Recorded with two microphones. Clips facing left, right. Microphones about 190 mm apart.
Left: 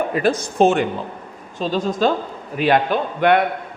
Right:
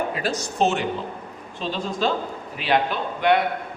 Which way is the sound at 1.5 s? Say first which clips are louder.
Left 6 dB; 45° left (ahead or behind).